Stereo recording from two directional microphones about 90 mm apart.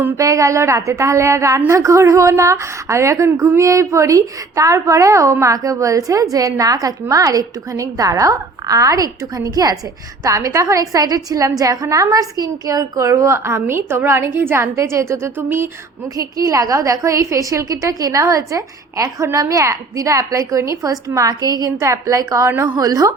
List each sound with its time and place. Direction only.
0.2 s a woman's voice: 35° right (ahead or behind)
16.1 s a woman's voice: 40° right (ahead or behind)
22.4 s a woman's voice: 25° right (ahead or behind)
22.7 s a woman's voice: 40° right (ahead or behind)